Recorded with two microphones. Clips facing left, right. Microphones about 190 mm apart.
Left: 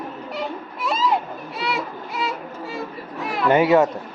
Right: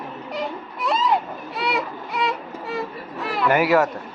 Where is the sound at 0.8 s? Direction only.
Centre (ahead or behind).